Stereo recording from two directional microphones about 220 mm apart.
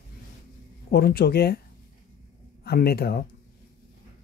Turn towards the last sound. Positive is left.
turn(degrees=45)  # may be behind; listen again after turning